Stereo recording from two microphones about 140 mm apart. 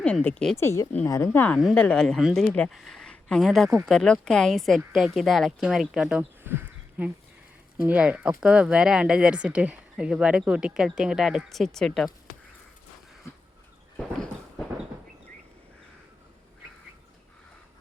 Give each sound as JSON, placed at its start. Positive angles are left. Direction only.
{"t": 0.0, "sound": "speech", "side_deg": 10}
{"t": 0.5, "sound": "a woman's voice", "side_deg": 20}
{"t": 13.9, "sound": "a sound", "side_deg": 5}